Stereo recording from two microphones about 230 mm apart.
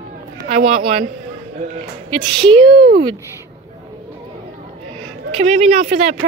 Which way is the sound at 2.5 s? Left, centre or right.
Right.